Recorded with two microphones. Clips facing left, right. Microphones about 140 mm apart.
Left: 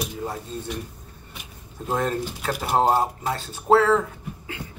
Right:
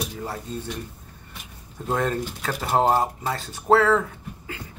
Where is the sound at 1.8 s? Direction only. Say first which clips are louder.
Even; 5° left (ahead or behind).